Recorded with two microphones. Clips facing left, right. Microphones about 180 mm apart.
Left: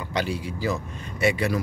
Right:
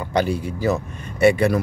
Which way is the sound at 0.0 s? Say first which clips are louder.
Right 6 dB; 50° right (ahead or behind).